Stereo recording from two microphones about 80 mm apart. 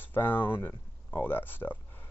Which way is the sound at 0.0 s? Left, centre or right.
Left.